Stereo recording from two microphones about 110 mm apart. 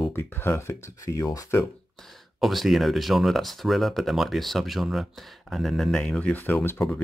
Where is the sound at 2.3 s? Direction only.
Centre (ahead or behind); by 7.0 s 20° left (ahead or behind).